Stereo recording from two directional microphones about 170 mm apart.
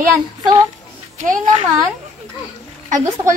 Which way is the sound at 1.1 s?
50° right (ahead or behind).